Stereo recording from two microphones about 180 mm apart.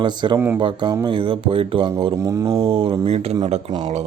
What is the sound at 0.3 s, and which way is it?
Speech, 15° right (ahead or behind).